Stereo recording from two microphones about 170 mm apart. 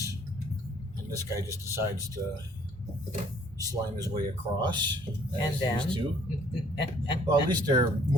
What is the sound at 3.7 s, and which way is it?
Speech, 20° right (ahead or behind).